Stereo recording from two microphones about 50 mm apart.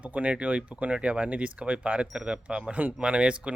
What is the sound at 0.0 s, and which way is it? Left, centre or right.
Speech, right.